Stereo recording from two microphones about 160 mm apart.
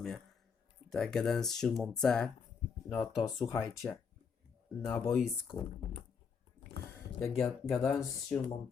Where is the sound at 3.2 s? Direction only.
20° left (ahead or behind).